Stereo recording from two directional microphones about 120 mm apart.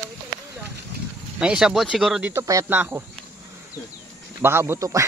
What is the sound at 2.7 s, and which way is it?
Speech, 15° right (ahead or behind).